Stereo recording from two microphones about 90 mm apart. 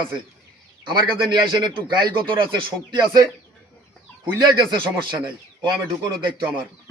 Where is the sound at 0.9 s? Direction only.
55° right (ahead or behind).